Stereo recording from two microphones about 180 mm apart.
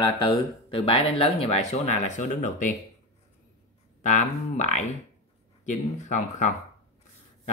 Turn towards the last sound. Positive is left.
turn(degrees=45)  # may be behind; listen again after turning